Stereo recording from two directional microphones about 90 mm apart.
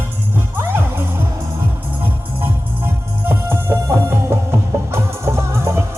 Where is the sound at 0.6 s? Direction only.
25° right (ahead or behind).